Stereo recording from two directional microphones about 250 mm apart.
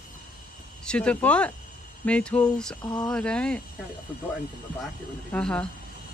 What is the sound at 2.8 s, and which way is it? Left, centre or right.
Speech, centre.